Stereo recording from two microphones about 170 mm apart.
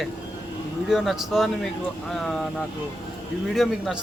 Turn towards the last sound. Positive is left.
turn(degrees=0)  # may be behind; listen again after turning